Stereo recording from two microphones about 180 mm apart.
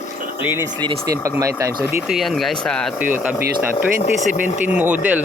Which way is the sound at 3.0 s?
10° right (ahead or behind).